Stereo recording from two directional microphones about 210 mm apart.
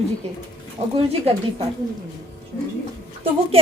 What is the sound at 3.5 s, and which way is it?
Speech, 25° right (ahead or behind).